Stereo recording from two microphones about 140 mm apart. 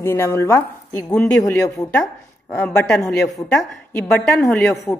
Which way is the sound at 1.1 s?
10° left (ahead or behind).